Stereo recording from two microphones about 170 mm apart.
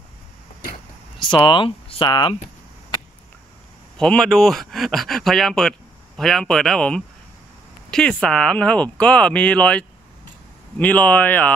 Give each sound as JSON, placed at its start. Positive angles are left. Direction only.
{"t": 1.3, "sound": "speech", "side_deg": 25}
{"t": 4.0, "sound": "speech", "side_deg": 5}